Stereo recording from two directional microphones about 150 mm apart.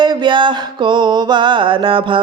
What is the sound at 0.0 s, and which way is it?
Mantra, 30° right (ahead or behind).